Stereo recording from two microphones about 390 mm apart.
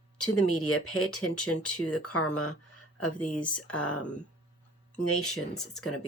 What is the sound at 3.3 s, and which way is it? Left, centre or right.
Speech, centre.